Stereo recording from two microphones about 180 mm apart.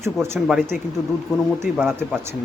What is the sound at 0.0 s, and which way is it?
Speech, 15° right (ahead or behind).